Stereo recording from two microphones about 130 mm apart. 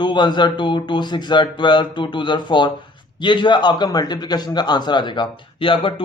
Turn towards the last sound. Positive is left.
turn(degrees=40)  # may be behind; listen again after turning